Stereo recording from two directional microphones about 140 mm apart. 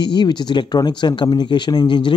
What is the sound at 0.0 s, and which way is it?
Speech, 35° left (ahead or behind).